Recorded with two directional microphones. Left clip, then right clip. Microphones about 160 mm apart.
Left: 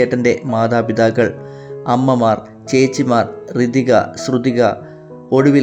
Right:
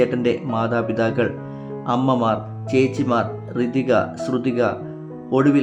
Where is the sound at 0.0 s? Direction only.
30° left (ahead or behind).